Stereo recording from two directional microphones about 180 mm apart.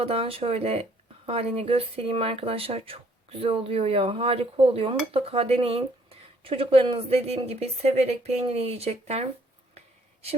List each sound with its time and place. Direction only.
0.0 s speech: 30° right (ahead or behind)